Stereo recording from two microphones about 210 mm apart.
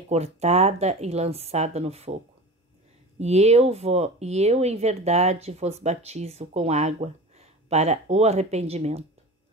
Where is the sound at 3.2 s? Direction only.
30° right (ahead or behind).